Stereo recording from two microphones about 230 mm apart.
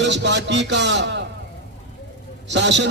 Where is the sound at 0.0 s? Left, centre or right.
Right.